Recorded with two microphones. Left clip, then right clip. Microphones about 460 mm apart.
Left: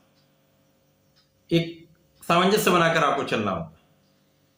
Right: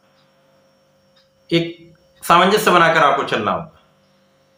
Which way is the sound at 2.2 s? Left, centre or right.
Left.